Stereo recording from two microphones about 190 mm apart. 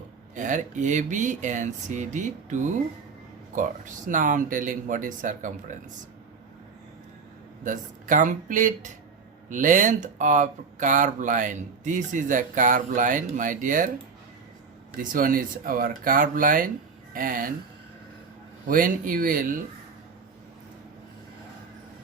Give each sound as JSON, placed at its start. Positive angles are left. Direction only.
{"t": 0.3, "sound": "speech", "side_deg": -40}
{"t": 7.6, "sound": "speech", "side_deg": -45}
{"t": 14.9, "sound": "speech", "side_deg": -45}
{"t": 18.7, "sound": "speech", "side_deg": -45}